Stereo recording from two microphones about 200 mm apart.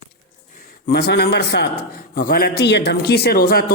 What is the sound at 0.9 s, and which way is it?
A man's voice, 55° left (ahead or behind).